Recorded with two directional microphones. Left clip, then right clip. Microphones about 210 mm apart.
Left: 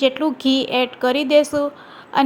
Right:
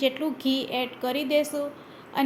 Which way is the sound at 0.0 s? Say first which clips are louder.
Left 8 dB; 25° left (ahead or behind).